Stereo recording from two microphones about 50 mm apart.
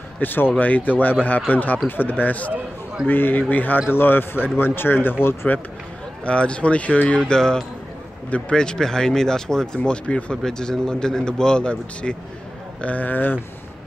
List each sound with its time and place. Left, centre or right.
0.2 s speech: left
6.2 s speech: left
7.2 s a man's voice: centre
10.4 s a man's voice: centre
12.8 s speech: left